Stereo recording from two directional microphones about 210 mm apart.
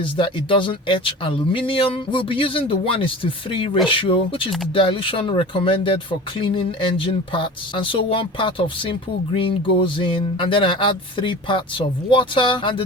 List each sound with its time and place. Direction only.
0.0 s speech: 25° left (ahead or behind)